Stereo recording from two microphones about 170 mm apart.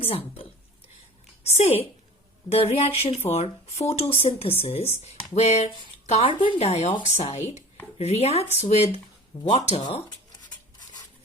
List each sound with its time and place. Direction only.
0.0 s speech: 35° left (ahead or behind)
1.5 s speech: 40° left (ahead or behind)